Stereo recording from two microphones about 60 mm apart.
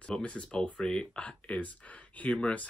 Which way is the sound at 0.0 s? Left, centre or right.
Centre.